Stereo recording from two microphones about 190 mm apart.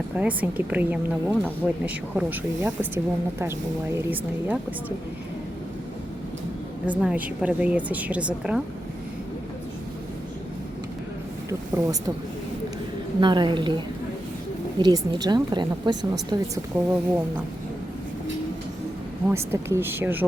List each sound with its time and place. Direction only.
0.2 s speech: 10° right (ahead or behind)
7.0 s speech: 5° right (ahead or behind)
11.4 s speech: 20° right (ahead or behind)
13.1 s a woman's voice: 25° right (ahead or behind)
19.3 s speech: 15° right (ahead or behind)